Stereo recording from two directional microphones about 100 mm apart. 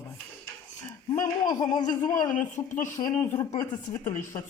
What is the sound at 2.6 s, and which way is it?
Speech, 30° left (ahead or behind).